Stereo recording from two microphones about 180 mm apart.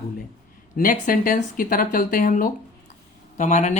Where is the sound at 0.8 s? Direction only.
50° left (ahead or behind).